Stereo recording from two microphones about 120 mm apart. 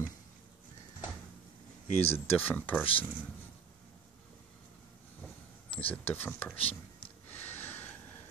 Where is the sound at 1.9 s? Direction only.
60° left (ahead or behind).